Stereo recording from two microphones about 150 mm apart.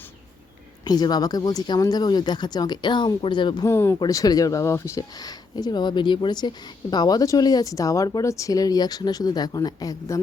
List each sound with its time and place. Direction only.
0.9 s speech: 25° left (ahead or behind)
3.7 s speech: 15° left (ahead or behind)